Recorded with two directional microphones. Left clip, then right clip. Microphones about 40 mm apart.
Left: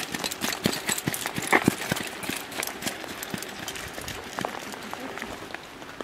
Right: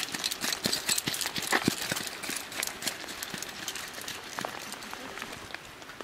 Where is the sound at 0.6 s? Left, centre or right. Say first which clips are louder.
Left 1 dB; right.